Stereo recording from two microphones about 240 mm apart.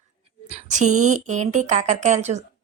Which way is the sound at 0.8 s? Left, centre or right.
Right.